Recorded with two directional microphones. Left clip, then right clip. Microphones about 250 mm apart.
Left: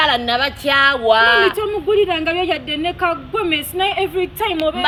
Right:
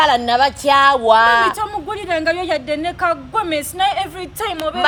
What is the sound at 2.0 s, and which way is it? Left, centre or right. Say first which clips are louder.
A woman's voice: left 1 dB; centre.